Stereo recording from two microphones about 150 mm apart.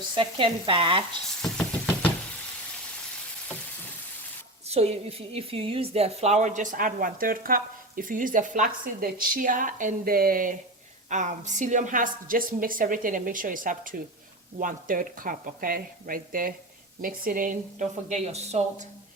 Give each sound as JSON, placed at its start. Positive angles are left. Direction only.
{"t": 0.1, "sound": "frying", "side_deg": -35}
{"t": 1.4, "sound": "a sound", "side_deg": 5}
{"t": 4.7, "sound": "a woman's voice", "side_deg": -45}
{"t": 11.1, "sound": "a woman's voice", "side_deg": -55}